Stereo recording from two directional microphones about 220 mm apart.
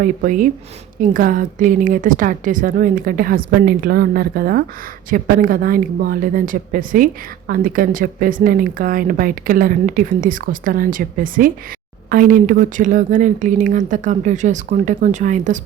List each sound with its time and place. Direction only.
0.0 s speech: 35° right (ahead or behind)